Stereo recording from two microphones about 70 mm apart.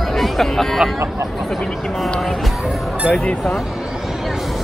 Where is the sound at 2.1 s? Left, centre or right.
Centre.